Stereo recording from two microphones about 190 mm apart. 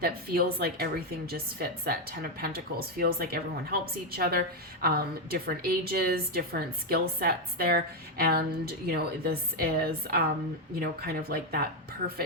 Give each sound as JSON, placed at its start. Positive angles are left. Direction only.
{"t": 0.0, "sound": "a woman's voice", "side_deg": -55}